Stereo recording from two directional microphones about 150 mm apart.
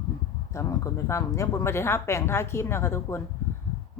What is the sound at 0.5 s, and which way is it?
Speech, 20° left (ahead or behind).